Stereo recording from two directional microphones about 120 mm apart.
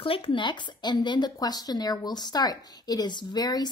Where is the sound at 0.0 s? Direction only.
50° left (ahead or behind).